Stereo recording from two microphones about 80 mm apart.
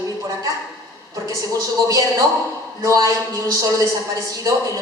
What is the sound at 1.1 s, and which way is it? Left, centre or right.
A woman's voice, right.